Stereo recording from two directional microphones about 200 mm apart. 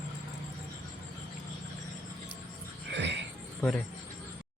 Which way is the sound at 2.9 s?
60° right (ahead or behind).